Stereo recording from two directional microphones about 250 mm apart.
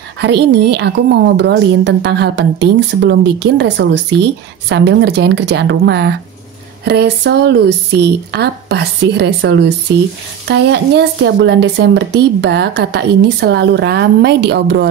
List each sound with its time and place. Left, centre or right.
0.2 s speech: right